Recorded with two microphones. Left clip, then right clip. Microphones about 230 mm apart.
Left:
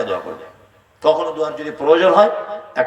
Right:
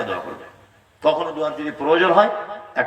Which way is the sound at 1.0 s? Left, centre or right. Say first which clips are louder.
Left 3 dB; left.